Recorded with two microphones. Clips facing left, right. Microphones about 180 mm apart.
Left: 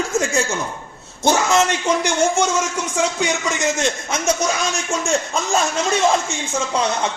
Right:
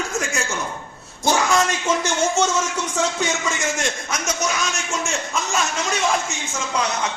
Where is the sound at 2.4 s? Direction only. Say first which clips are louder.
Left 1 dB; 10° left (ahead or behind); by 5.5 s 35° left (ahead or behind).